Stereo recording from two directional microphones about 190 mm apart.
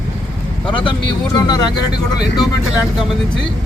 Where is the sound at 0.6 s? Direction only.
25° left (ahead or behind).